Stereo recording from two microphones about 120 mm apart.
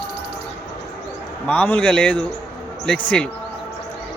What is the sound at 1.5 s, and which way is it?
A man's voice, 15° left (ahead or behind).